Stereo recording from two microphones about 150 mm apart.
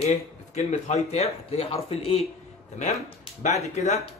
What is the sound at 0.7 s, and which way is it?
Speech, 45° left (ahead or behind).